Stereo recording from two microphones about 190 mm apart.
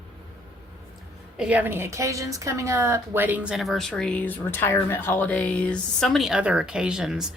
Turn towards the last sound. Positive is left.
turn(degrees=0)  # may be behind; listen again after turning